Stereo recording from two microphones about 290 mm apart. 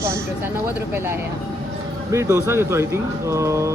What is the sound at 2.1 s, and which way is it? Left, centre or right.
Speech, centre.